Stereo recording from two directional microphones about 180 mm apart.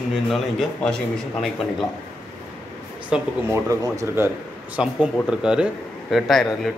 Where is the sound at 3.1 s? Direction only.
15° right (ahead or behind).